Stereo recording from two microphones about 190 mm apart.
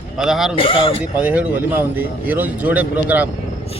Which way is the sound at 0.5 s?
30° left (ahead or behind).